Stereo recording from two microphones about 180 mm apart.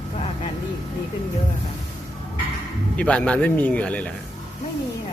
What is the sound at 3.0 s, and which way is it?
A man's voice, 5° left (ahead or behind).